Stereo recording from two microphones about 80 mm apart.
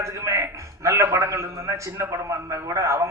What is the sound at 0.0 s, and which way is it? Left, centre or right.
A man's voice, right.